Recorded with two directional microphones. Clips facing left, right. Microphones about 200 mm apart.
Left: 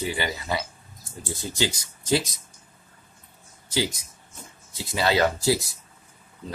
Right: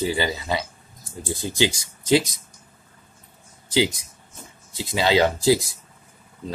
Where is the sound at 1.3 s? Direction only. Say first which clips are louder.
Right 5 dB; 20° right (ahead or behind).